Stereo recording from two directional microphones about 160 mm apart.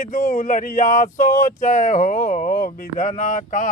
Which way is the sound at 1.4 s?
50° left (ahead or behind).